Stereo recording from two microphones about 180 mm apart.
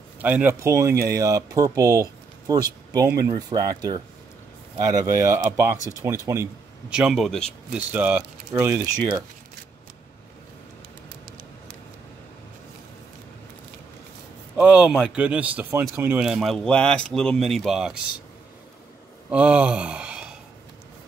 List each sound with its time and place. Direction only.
0.2 s speech: 10° right (ahead or behind)
7.0 s speech: centre (ahead or behind)
7.9 s speech: 10° right (ahead or behind)
14.6 s speech: 5° right (ahead or behind)
19.3 s gasp: 5° right (ahead or behind)